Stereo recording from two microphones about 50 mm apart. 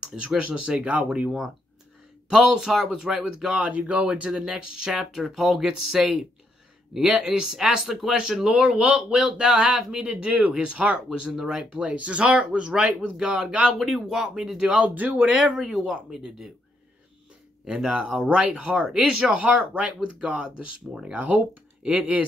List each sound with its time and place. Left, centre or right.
0.7 s speech: right
2.6 s speech: centre
3.5 s speech: right
4.3 s speech: centre
5.1 s speech: centre
8.5 s speech: right
11.1 s speech: centre
11.7 s speech: right
13.7 s speech: centre
14.6 s speech: right
15.7 s speech: centre
17.6 s speech: centre
19.4 s speech: right